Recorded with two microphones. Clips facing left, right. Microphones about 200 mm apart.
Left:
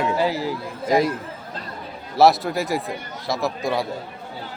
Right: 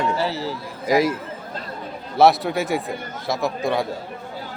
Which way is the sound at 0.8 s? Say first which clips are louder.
Right 1 dB; centre (ahead or behind).